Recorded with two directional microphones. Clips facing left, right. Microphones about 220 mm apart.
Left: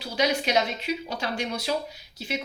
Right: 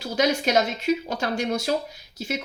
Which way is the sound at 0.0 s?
45° right (ahead or behind).